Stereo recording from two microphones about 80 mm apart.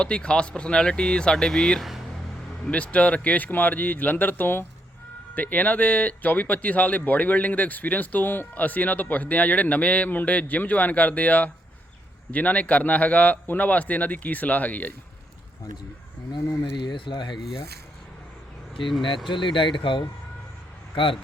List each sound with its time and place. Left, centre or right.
0.0 s speech: centre
2.6 s speech: centre
16.7 s speech: left
19.3 s speech: left